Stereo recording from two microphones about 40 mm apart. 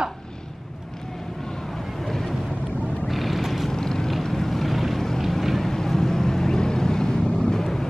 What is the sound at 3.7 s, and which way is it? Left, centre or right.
Vehicle, centre.